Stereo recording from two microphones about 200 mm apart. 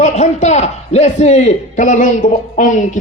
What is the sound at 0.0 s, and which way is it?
A man's voice, 35° left (ahead or behind).